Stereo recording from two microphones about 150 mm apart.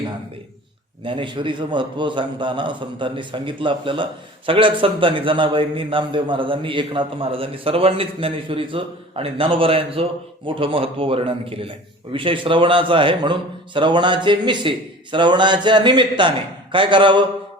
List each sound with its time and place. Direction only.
1.0 s a man's voice: 35° right (ahead or behind)